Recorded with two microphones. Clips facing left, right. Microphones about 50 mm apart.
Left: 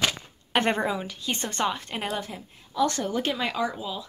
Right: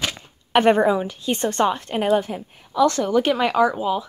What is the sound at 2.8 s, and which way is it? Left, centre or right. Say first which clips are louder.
Speech: right 8 dB; right.